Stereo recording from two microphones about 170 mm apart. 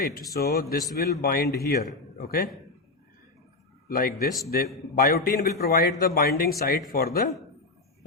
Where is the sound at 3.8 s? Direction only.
60° left (ahead or behind).